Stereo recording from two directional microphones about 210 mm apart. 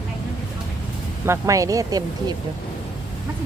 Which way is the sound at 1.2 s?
15° right (ahead or behind).